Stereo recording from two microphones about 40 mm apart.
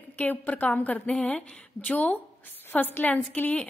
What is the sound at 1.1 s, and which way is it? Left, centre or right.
A woman's voice, left.